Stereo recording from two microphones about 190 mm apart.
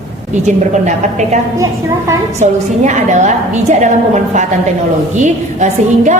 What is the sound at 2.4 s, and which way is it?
A woman's voice, 40° right (ahead or behind).